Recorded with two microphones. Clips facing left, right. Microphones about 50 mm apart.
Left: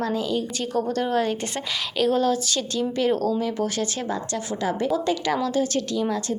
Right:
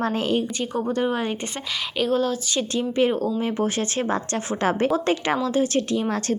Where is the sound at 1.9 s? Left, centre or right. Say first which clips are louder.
Left 1 dB; centre.